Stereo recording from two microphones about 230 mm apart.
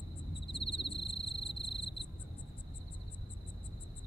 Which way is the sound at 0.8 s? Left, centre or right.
Left.